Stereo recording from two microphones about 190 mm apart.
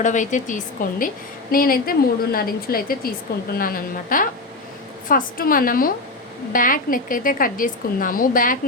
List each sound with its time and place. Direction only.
0.0 s a woman's voice: 40° left (ahead or behind)